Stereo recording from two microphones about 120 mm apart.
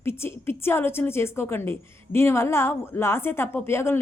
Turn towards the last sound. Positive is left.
turn(degrees=20)  # may be behind; listen again after turning